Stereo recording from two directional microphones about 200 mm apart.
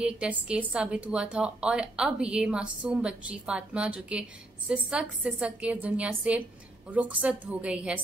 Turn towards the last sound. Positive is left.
turn(degrees=-5)  # may be behind; listen again after turning